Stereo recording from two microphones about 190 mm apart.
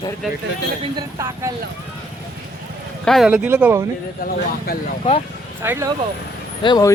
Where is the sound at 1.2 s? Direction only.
15° right (ahead or behind).